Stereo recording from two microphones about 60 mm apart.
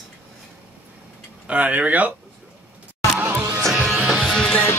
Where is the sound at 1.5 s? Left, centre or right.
Right.